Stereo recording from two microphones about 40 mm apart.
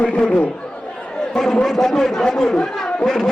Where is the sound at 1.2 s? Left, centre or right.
Centre.